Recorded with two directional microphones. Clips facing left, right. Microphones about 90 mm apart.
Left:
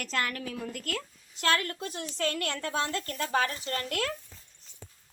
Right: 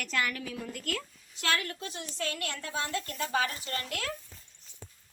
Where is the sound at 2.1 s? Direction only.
50° left (ahead or behind).